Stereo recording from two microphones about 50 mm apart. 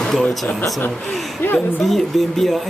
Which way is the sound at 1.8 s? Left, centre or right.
Centre.